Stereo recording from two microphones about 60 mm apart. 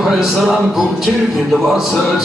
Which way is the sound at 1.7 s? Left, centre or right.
Centre.